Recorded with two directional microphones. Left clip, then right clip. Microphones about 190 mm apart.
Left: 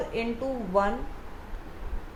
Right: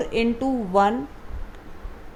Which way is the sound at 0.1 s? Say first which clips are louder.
Right 9 dB; 60° right (ahead or behind).